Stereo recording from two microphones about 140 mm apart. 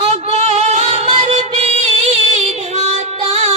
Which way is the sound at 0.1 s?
50° right (ahead or behind).